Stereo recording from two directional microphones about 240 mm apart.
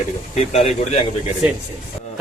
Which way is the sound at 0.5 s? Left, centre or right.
Left.